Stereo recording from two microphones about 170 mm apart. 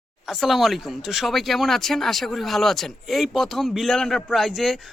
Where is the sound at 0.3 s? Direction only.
Centre (ahead or behind).